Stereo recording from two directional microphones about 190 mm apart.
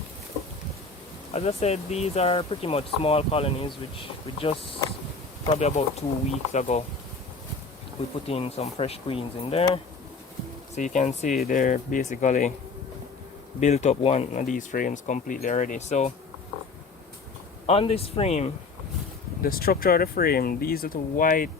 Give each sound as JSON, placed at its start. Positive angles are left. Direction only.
{"t": 1.3, "sound": "speech", "side_deg": 35}
{"t": 8.3, "sound": "speech", "side_deg": 30}
{"t": 13.6, "sound": "speech", "side_deg": 35}
{"t": 17.7, "sound": "speech", "side_deg": 30}
{"t": 19.4, "sound": "speech", "side_deg": 50}